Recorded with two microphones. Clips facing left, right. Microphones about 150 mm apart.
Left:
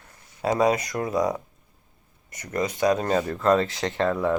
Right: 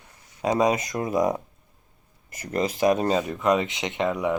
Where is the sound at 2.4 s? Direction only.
25° right (ahead or behind).